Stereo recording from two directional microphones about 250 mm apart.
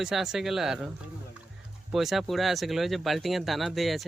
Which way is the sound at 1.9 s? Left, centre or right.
Centre.